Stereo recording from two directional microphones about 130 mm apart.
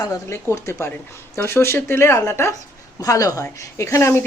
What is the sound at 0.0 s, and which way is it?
Speech, 25° left (ahead or behind).